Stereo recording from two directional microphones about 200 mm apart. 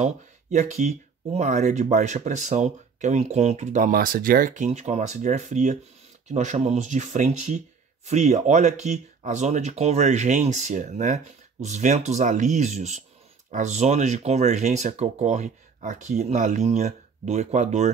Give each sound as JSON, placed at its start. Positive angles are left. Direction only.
{"t": 0.0, "sound": "speech", "side_deg": -35}